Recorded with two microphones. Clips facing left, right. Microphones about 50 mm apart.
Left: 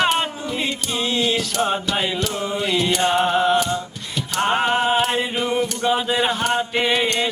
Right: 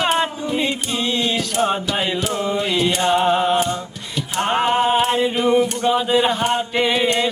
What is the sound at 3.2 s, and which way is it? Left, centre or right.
Music, centre.